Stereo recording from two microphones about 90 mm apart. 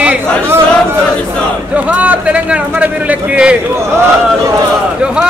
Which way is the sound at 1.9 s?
15° right (ahead or behind).